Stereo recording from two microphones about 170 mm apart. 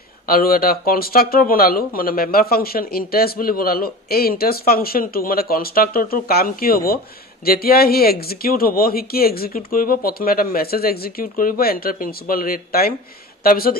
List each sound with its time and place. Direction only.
0.3 s speech: 60° left (ahead or behind)